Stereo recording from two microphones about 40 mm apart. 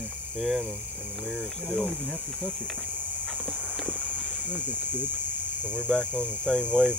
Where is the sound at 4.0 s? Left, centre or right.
Left.